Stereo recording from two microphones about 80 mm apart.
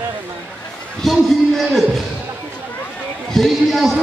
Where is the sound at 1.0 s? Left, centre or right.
Centre.